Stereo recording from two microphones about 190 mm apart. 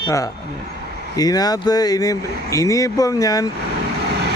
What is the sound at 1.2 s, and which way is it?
Speech, 20° left (ahead or behind).